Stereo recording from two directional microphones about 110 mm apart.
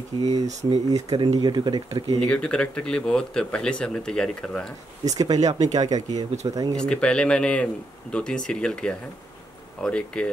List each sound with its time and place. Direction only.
0.5 s speech: 90° right
0.8 s speech: 35° right (ahead or behind)
2.1 s speech: 10° left (ahead or behind)
5.1 s speech: 35° right (ahead or behind)
6.8 s speech: 10° left (ahead or behind)